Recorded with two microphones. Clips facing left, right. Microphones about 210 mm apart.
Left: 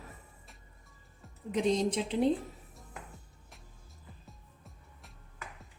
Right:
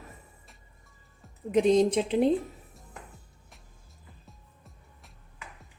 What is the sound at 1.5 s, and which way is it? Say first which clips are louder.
Speech: right 7 dB; 60° right (ahead or behind).